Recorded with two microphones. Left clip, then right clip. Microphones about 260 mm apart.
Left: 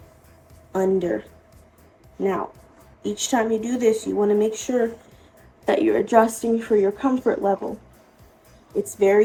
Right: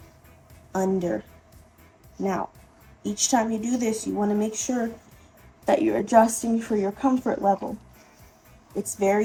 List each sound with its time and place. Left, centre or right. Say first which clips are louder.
0.7 s speech: left 4 dB; right
2.2 s a woman's voice: left 4 dB; right
8.8 s a woman's voice: left 5 dB; right